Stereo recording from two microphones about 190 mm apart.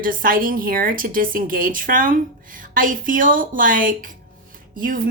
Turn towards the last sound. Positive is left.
turn(degrees=-50)  # may be behind; listen again after turning